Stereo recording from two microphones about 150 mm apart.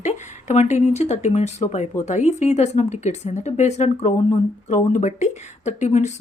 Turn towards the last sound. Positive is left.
turn(degrees=50)  # may be behind; listen again after turning